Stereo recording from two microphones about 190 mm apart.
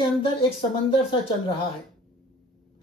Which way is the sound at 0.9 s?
30° left (ahead or behind).